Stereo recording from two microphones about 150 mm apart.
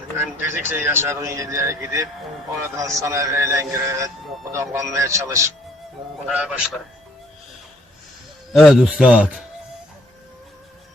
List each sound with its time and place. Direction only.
0.2 s a man's voice: 15° right (ahead or behind)
6.2 s a man's voice: 5° right (ahead or behind)
8.5 s a man's voice: centre (ahead or behind)